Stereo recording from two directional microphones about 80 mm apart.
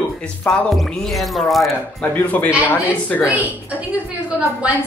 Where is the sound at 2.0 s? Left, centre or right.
Left.